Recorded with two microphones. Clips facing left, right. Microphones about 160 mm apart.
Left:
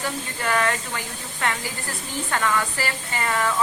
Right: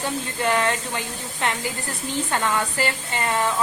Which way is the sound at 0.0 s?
25° right (ahead or behind).